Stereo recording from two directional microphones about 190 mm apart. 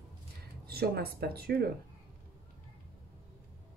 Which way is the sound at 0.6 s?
55° right (ahead or behind).